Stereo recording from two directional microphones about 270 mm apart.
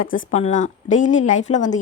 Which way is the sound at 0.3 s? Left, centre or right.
Left.